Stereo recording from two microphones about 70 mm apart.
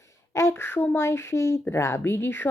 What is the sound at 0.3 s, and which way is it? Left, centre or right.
A child's voice, left.